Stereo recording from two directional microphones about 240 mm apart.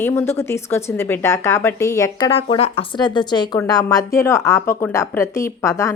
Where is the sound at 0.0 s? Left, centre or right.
Centre.